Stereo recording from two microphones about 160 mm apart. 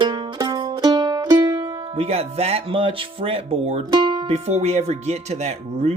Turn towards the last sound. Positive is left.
turn(degrees=-45)  # may be behind; listen again after turning